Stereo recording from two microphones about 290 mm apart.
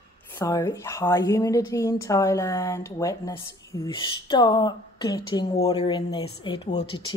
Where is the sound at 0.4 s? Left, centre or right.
Centre.